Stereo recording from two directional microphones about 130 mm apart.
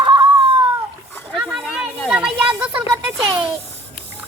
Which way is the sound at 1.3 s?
5° right (ahead or behind).